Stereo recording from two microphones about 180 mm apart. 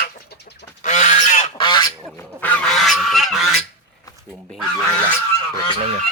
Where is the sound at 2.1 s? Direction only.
10° left (ahead or behind).